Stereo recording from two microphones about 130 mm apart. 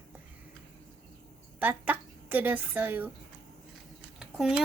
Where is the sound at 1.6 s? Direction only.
15° right (ahead or behind).